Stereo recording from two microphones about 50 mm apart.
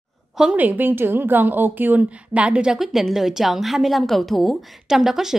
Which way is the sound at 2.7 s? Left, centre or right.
Centre.